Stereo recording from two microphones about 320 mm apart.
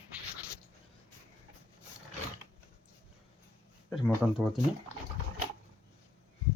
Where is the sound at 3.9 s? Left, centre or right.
Centre.